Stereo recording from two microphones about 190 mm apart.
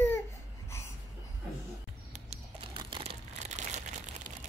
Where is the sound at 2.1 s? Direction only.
30° right (ahead or behind).